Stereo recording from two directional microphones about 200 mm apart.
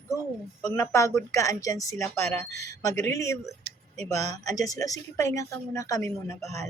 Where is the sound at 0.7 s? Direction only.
15° left (ahead or behind).